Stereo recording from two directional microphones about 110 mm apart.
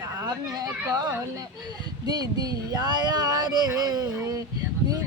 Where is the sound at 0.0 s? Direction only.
30° right (ahead or behind).